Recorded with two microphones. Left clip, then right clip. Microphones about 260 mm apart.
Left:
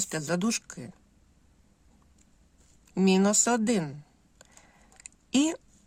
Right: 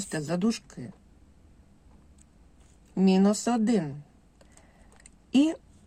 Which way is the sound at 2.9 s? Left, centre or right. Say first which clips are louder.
Even; left.